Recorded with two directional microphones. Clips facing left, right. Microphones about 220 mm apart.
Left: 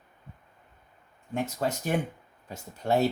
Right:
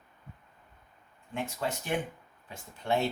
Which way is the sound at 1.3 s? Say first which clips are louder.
Left 4 dB; 40° left (ahead or behind).